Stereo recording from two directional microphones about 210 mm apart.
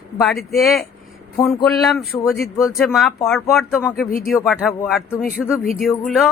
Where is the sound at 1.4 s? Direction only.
15° left (ahead or behind).